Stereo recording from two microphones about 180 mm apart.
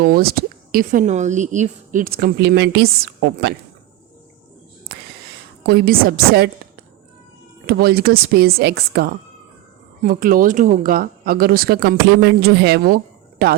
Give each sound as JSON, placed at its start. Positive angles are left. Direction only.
{"t": 0.0, "sound": "speech", "side_deg": -55}
{"t": 5.6, "sound": "speech", "side_deg": -55}
{"t": 7.7, "sound": "speech", "side_deg": -60}